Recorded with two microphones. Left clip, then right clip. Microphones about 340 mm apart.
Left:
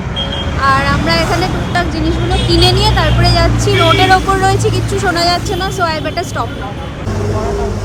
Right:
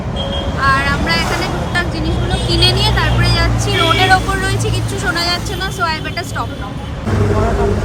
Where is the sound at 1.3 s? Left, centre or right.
Right.